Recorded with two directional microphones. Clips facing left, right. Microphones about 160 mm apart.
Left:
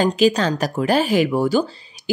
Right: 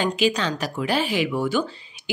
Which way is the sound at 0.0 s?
40° left (ahead or behind).